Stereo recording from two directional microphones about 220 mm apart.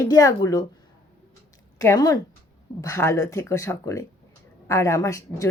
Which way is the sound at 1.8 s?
15° left (ahead or behind).